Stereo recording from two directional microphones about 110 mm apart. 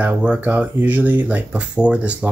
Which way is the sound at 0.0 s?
10° right (ahead or behind).